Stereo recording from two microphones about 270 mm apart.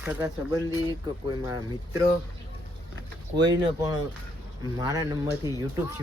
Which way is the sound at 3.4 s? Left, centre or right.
Centre.